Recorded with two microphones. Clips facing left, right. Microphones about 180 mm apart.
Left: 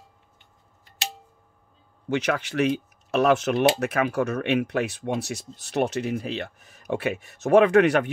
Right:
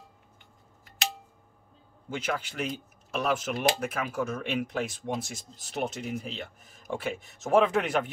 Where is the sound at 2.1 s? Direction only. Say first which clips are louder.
Left 8 dB; 80° left.